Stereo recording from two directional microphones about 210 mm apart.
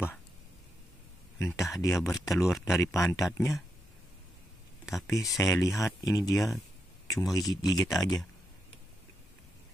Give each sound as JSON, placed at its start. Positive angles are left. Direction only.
{"t": 1.4, "sound": "speech", "side_deg": 15}
{"t": 4.9, "sound": "speech", "side_deg": 15}